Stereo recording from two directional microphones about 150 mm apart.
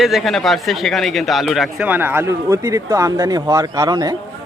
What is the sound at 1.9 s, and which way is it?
A man's voice, 15° right (ahead or behind).